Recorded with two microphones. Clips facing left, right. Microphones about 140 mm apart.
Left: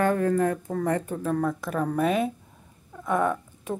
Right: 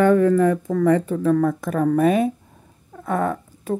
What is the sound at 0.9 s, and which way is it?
Speech, 90° right.